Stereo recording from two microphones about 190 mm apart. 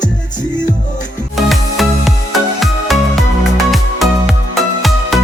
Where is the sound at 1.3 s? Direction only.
Centre (ahead or behind).